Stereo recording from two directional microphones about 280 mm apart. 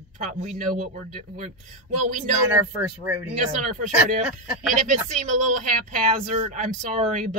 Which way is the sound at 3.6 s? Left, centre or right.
Right.